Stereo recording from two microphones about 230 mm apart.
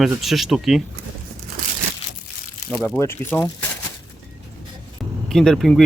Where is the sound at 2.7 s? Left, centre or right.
Centre.